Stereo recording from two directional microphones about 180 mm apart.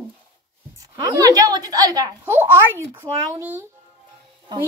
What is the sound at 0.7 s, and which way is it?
A child's voice, 20° right (ahead or behind).